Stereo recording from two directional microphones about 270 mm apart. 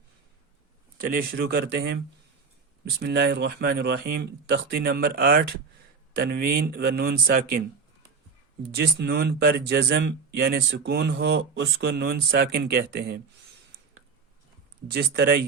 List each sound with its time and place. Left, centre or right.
0.9 s speech: right
3.0 s speech: right
8.7 s speech: right
14.8 s speech: right